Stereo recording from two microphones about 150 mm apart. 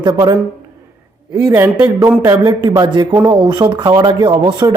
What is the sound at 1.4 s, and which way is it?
A man's voice, 20° right (ahead or behind).